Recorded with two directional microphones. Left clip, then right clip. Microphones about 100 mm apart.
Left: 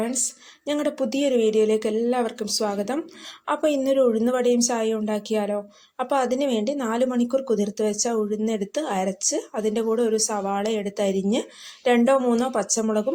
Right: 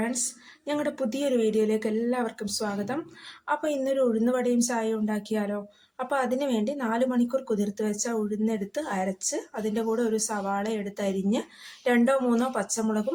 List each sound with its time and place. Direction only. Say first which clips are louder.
0.6 s speech: left 4 dB; 40° left (ahead or behind)